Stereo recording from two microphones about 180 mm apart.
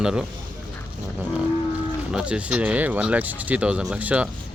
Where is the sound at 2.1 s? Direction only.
5° right (ahead or behind).